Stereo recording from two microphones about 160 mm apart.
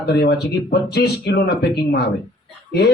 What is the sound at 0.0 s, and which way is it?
Speech, 90° left.